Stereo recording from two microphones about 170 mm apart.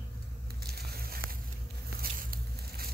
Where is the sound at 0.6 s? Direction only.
65° right (ahead or behind).